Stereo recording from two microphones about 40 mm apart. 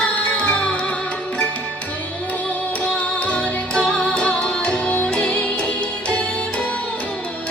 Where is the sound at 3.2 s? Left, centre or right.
Left.